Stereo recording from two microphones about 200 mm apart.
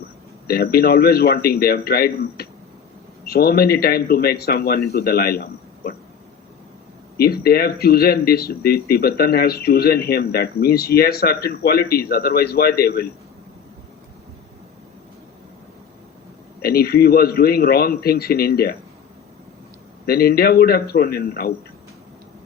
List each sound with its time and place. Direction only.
0.4 s speech: 50° left (ahead or behind)
7.2 s speech: 50° left (ahead or behind)
16.6 s speech: 50° left (ahead or behind)
20.1 s speech: 50° left (ahead or behind)